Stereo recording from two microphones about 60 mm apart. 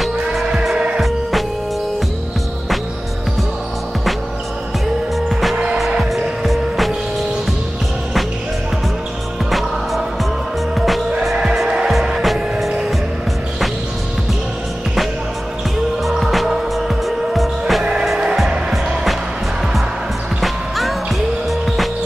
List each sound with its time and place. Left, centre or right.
0.0 s music: centre
5.3 s music: centre
9.5 s music: centre
11.5 s music: centre
16.0 s music: centre
20.3 s music: centre